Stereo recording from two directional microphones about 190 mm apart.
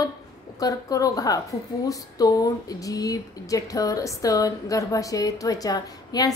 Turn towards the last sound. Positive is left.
turn(degrees=20)  # may be behind; listen again after turning